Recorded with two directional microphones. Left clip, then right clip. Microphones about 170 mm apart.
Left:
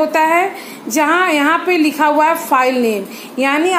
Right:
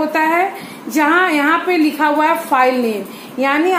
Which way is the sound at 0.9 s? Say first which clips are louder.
Even; 55° left (ahead or behind).